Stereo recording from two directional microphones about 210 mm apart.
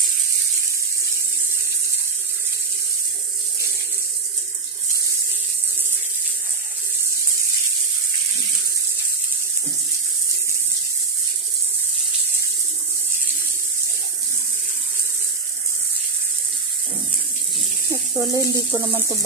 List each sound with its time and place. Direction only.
17.8 s speech: 15° right (ahead or behind)